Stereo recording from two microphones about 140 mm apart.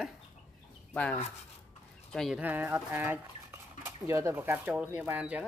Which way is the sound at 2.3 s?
10° right (ahead or behind).